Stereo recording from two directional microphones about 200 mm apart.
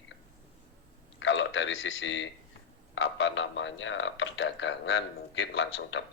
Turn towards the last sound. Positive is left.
turn(degrees=65)  # may be behind; listen again after turning